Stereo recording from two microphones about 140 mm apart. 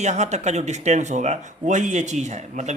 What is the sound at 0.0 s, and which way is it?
Speech, 55° right (ahead or behind).